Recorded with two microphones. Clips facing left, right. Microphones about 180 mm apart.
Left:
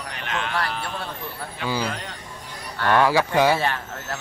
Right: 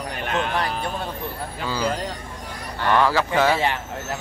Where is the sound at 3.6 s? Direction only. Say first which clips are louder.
Right 2 dB; 15° right (ahead or behind).